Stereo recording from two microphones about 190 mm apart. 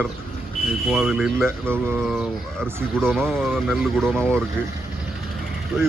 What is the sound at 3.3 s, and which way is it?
Speech, centre (ahead or behind).